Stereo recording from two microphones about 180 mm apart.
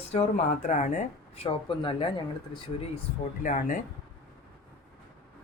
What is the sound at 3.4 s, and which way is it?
Speech, 45° left (ahead or behind).